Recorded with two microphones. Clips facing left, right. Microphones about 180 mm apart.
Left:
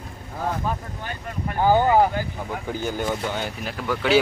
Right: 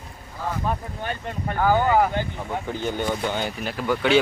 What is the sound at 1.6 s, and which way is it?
Speech, 25° left (ahead or behind).